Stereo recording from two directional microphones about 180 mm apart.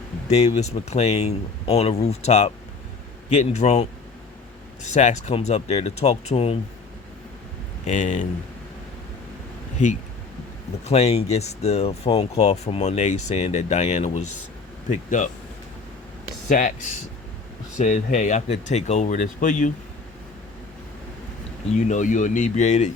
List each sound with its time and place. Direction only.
0.3 s speech: 40° left (ahead or behind)
7.9 s speech: 40° left (ahead or behind)
10.8 s speech: 35° left (ahead or behind)
16.5 s speech: 45° left (ahead or behind)
17.7 s speech: 40° left (ahead or behind)
21.8 s speech: 45° left (ahead or behind)